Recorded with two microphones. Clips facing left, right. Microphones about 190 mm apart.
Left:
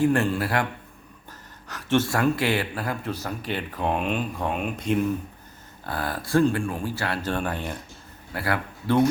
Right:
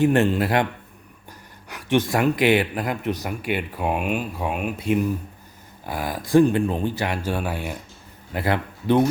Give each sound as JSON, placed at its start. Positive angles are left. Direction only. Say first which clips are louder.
{"t": 0.0, "sound": "speech", "louder": "right 3 dB", "side_deg": -20}
{"t": 8.3, "sound": "speech", "louder": "right 4 dB", "side_deg": -20}